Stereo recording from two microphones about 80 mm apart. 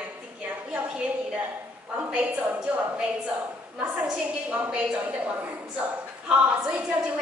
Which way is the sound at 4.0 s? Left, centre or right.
Centre.